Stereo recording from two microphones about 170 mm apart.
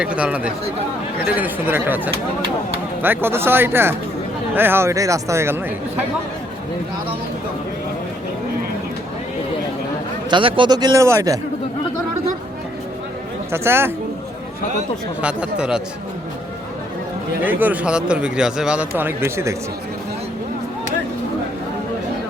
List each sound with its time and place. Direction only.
0.0 s a man's voice: 5° right (ahead or behind)
3.0 s a man's voice: 10° right (ahead or behind)
10.2 s speech: 30° right (ahead or behind)
13.5 s a man's voice: 15° right (ahead or behind)
15.2 s speech: 5° right (ahead or behind)
17.4 s a man's voice: 10° right (ahead or behind)